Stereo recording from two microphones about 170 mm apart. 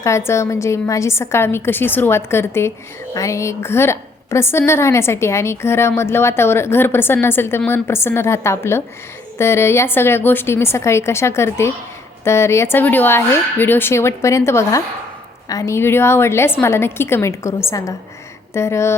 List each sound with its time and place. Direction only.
0.0 s a woman's voice: 15° left (ahead or behind)